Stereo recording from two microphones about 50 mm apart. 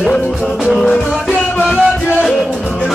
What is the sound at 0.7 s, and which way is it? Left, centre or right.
Music, centre.